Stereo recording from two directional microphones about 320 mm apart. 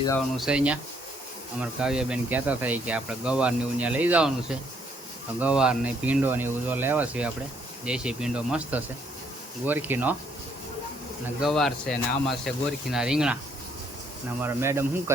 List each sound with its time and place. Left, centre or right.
0.3 s speech: centre
1.8 s speech: centre
11.3 s speech: centre
14.4 s speech: centre